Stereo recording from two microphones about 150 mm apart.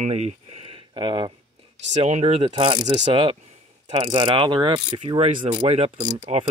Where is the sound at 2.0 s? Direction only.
45° right (ahead or behind).